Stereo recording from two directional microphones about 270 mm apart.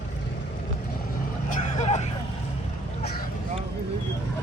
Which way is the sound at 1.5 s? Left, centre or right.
Left.